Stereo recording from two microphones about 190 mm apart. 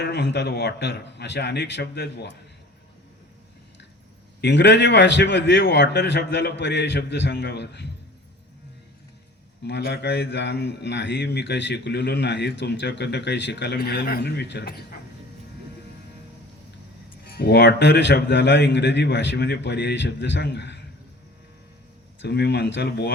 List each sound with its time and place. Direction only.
0.0 s a man's voice: 60° left (ahead or behind)
4.4 s a man's voice: 65° left (ahead or behind)
9.6 s a man's voice: 65° left (ahead or behind)
17.2 s a man's voice: 55° left (ahead or behind)
22.2 s a man's voice: 60° left (ahead or behind)